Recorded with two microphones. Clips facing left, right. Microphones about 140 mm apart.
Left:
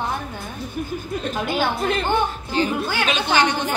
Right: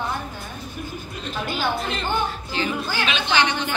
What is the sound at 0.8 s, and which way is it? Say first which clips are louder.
Speech: left 9 dB; 50° left (ahead or behind).